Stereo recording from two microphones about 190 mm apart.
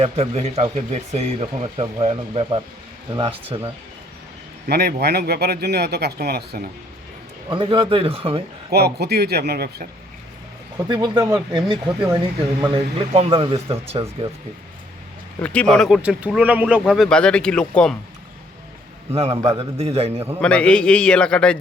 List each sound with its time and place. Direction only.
0.0 s speech: 35° right (ahead or behind)
4.7 s speech: 55° right (ahead or behind)
7.5 s speech: 25° right (ahead or behind)
8.7 s speech: 60° right (ahead or behind)
10.8 s speech: 25° right (ahead or behind)
15.4 s speech: 5° left (ahead or behind)
19.1 s speech: 30° right (ahead or behind)
20.4 s speech: 5° left (ahead or behind)